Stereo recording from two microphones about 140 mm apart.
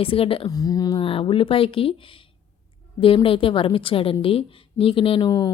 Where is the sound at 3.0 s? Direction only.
40° left (ahead or behind).